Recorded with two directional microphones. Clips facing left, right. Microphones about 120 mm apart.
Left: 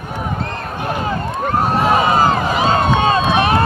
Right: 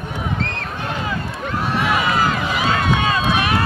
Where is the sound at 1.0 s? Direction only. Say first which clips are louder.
Left 5 dB; 45° left (ahead or behind).